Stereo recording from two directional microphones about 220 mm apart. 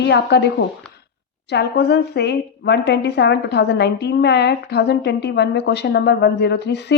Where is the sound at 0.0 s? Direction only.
50° left (ahead or behind).